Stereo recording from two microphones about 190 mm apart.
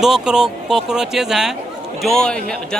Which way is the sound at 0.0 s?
5° right (ahead or behind).